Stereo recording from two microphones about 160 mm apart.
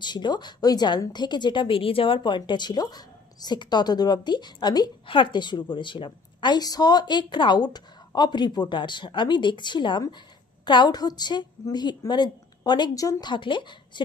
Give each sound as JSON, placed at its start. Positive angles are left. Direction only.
{"t": 0.0, "sound": "a woman's voice", "side_deg": 25}